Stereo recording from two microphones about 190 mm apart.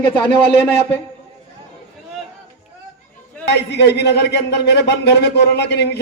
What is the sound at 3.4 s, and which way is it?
A man's voice, 65° left (ahead or behind).